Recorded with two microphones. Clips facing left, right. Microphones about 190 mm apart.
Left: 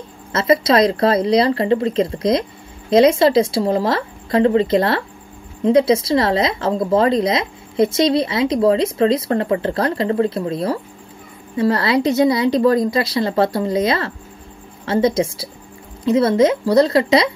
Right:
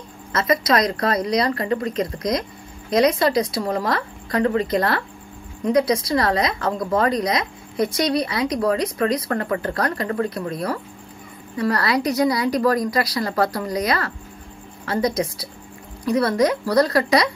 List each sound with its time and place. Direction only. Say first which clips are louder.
0.3 s a woman's voice: left 4 dB; 25° left (ahead or behind)